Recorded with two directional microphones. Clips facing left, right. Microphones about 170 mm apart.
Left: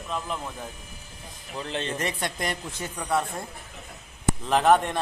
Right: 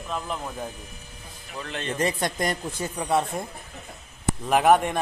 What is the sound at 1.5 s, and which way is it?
Speech, 30° left (ahead or behind).